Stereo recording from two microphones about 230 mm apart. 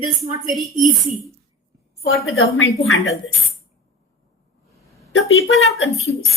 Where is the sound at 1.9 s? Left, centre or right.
Left.